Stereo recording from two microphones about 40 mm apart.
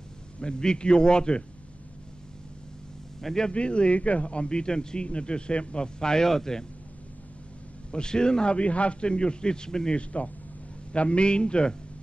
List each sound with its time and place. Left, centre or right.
0.4 s a man's voice: left
3.2 s speech: centre
3.4 s a man's voice: left
7.9 s a man's voice: left
9.9 s a man's voice: left